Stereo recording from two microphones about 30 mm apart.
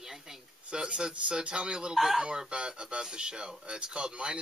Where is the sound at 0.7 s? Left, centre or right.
Right.